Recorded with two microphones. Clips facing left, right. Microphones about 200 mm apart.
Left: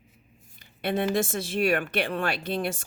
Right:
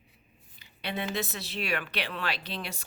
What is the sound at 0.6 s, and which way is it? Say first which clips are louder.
Speech: left 8 dB; 50° left (ahead or behind).